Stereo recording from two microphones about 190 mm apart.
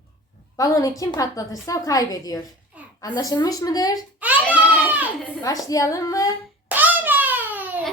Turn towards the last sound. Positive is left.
turn(degrees=-10)  # may be behind; listen again after turning